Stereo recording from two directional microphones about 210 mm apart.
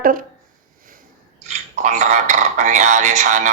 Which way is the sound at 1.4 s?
35° right (ahead or behind).